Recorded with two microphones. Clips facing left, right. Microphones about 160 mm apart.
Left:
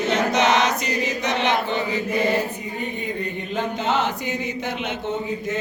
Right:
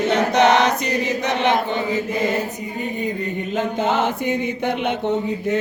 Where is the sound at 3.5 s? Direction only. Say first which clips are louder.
Right 2 dB; 50° right (ahead or behind).